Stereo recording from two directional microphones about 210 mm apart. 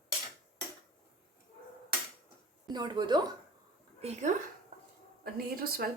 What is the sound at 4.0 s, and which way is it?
Speech, 30° right (ahead or behind).